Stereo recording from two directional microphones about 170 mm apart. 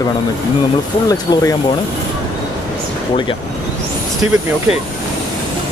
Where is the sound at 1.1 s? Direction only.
20° left (ahead or behind).